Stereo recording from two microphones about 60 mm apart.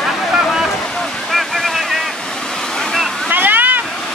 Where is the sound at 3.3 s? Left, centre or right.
Right.